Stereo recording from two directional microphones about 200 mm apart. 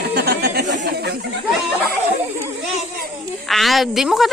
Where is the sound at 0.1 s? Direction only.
55° right (ahead or behind).